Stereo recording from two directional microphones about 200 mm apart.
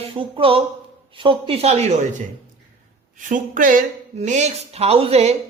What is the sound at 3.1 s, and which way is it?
Speech, 40° right (ahead or behind).